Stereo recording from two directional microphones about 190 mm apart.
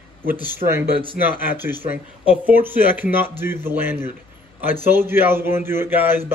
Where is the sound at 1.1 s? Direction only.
10° right (ahead or behind).